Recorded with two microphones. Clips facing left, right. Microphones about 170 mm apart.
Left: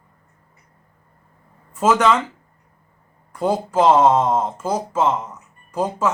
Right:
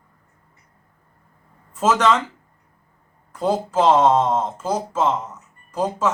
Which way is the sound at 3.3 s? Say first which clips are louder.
Left 1 dB; 10° left (ahead or behind).